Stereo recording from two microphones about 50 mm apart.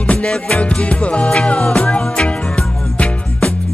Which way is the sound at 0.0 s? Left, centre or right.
Centre.